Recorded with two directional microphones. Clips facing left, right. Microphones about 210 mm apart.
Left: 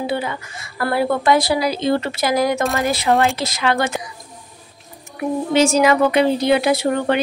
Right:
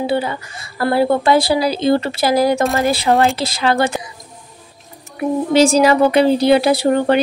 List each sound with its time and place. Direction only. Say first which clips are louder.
0.0 s a woman's voice: right 4 dB; 30° right (ahead or behind)
3.1 s speech: right 2 dB; centre (ahead or behind)
3.3 s a woman's voice: right 3 dB; 30° right (ahead or behind)
5.5 s a woman's voice: right 3 dB; 35° right (ahead or behind)